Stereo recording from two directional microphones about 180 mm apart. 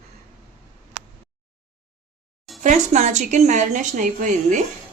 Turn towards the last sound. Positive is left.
turn(degrees=-45)  # may be behind; listen again after turning